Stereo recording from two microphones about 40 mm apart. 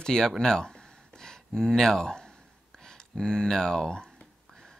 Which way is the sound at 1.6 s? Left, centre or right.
Centre.